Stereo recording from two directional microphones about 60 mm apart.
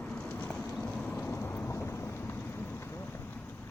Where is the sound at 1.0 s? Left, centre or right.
Left.